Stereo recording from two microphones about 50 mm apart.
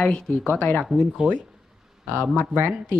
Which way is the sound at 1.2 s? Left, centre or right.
Centre.